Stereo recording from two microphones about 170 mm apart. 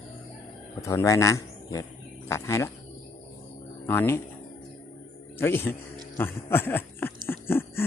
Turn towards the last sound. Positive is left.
turn(degrees=15)  # may be behind; listen again after turning